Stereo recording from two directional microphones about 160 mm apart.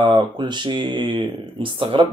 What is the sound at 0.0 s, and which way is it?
Speech, 30° right (ahead or behind).